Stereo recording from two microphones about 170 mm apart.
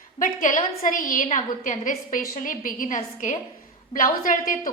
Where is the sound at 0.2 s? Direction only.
50° left (ahead or behind).